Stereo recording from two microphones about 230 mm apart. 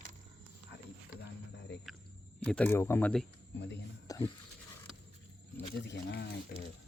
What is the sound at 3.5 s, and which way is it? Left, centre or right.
Speech, left.